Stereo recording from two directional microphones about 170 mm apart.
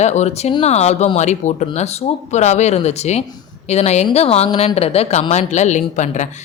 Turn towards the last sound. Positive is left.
turn(degrees=45)  # may be behind; listen again after turning